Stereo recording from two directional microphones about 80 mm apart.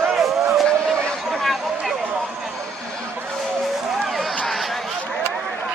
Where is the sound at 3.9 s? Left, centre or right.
Centre.